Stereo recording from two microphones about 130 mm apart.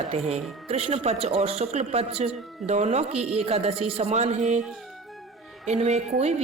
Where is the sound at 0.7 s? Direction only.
50° right (ahead or behind).